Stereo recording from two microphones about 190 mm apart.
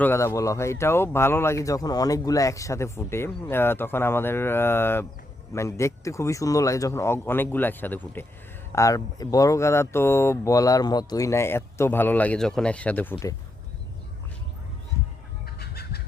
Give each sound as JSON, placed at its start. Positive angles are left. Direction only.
{"t": 0.0, "sound": "speech", "side_deg": 15}
{"t": 15.4, "sound": "fowl", "side_deg": 55}